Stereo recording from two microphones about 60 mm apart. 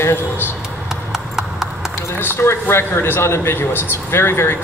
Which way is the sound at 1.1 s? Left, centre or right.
Centre.